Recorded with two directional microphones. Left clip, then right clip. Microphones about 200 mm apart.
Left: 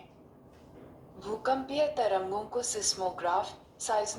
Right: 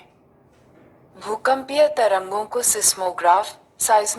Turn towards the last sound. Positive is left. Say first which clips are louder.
# right 13 dB
turn(degrees=-35)  # may be behind; listen again after turning